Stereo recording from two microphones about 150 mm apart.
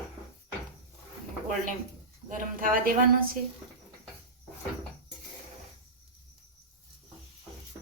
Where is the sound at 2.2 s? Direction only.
65° right (ahead or behind).